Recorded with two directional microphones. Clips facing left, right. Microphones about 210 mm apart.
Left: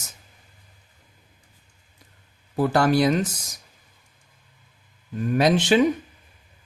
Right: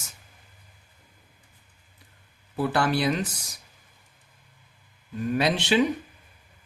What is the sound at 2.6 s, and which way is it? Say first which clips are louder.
Speech: left 5 dB; 45° left (ahead or behind).